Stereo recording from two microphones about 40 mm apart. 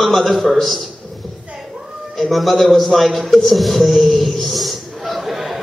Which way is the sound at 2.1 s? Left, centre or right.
Centre.